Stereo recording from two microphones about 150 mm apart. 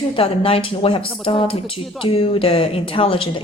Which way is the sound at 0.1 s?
35° left (ahead or behind).